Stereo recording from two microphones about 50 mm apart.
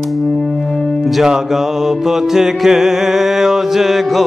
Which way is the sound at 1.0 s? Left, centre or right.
Centre.